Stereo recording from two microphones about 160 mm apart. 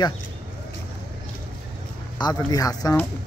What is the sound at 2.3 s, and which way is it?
Speech, 20° left (ahead or behind).